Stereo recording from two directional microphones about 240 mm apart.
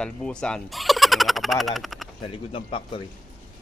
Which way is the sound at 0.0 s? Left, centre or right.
Centre.